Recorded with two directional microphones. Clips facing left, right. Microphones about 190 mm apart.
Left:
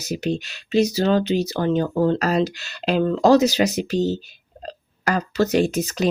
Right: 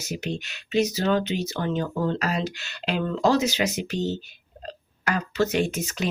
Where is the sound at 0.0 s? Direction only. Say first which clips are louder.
Left 6 dB; 35° left (ahead or behind).